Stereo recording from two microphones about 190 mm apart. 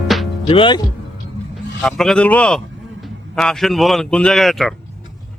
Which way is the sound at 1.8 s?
Centre (ahead or behind).